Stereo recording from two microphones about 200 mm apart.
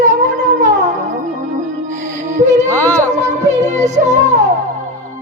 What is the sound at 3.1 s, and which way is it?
Music, 35° right (ahead or behind).